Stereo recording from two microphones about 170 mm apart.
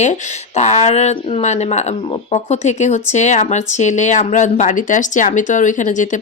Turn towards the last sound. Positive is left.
turn(degrees=45)  # may be behind; listen again after turning